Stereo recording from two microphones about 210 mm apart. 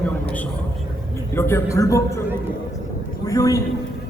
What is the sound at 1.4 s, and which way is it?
Speech, 10° left (ahead or behind).